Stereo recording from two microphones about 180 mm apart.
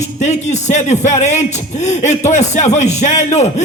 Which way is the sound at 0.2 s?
40° left (ahead or behind).